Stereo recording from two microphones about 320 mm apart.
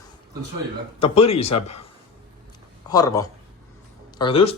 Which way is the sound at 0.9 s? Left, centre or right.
Centre.